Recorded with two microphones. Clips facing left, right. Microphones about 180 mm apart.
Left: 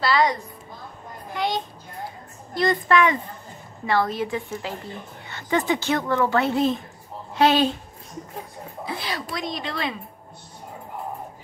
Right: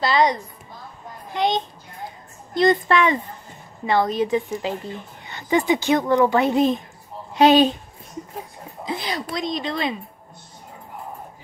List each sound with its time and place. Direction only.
0.0 s a woman's voice: 20° right (ahead or behind)
8.8 s a woman's voice: 20° right (ahead or behind)